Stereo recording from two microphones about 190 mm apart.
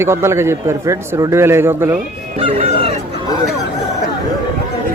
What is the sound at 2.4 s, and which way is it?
Speech, 30° right (ahead or behind).